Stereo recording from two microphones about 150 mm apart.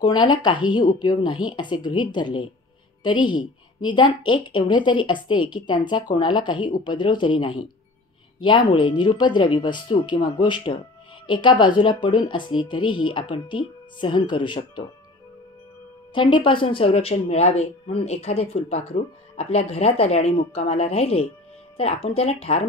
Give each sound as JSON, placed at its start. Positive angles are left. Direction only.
{"t": 0.0, "sound": "a woman's voice", "side_deg": 30}
{"t": 16.2, "sound": "speech", "side_deg": 35}